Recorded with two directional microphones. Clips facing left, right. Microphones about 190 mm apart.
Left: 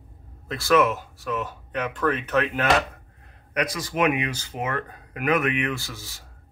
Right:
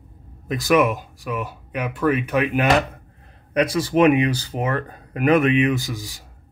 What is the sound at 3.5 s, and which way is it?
Speech, 30° right (ahead or behind).